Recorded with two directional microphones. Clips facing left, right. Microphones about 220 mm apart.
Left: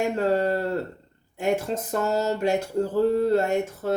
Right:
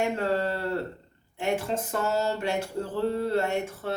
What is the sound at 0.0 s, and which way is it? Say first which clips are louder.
Speech: left 4 dB; 40° left (ahead or behind).